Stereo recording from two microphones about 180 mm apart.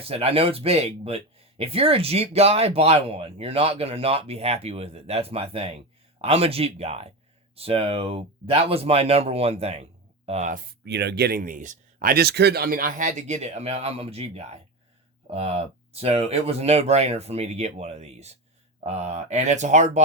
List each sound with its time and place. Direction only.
0.0 s speech: 35° right (ahead or behind)
10.8 s speech: 70° right (ahead or behind); by 20.0 s 40° right (ahead or behind)